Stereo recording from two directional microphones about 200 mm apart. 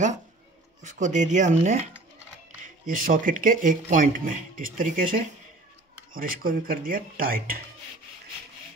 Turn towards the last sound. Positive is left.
turn(degrees=-45)  # may be behind; listen again after turning